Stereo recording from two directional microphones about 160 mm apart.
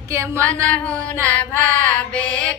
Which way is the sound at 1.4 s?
10° left (ahead or behind).